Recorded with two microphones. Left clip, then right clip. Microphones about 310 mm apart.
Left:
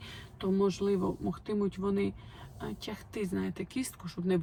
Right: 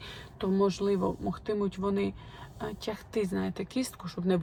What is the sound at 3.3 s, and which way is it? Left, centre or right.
Speech, centre.